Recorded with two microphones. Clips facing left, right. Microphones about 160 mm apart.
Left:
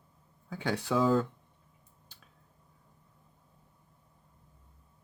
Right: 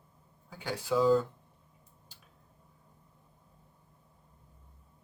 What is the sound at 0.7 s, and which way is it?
Speech, 75° left (ahead or behind).